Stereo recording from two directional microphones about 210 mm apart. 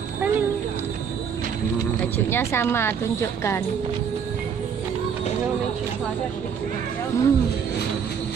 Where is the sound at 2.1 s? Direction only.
10° left (ahead or behind).